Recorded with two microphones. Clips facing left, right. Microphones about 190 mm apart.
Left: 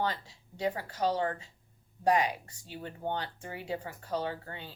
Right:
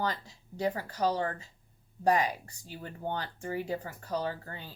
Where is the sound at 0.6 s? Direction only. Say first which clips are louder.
Right 1 dB; 40° right (ahead or behind).